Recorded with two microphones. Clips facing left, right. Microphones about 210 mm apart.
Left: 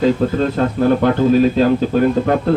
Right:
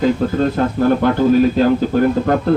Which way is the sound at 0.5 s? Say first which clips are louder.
Even; 25° left (ahead or behind).